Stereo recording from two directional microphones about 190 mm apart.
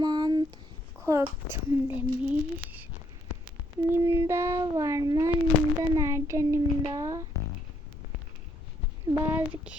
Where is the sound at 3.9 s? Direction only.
15° right (ahead or behind).